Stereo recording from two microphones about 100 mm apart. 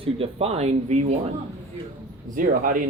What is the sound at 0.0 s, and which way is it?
Speech, 75° right (ahead or behind).